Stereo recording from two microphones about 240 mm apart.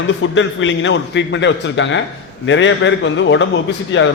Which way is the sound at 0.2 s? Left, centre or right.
Left.